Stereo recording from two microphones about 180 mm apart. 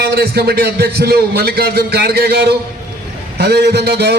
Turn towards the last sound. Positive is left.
turn(degrees=-65)  # may be behind; listen again after turning